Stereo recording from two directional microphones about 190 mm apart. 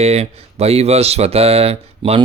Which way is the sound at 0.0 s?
35° right (ahead or behind).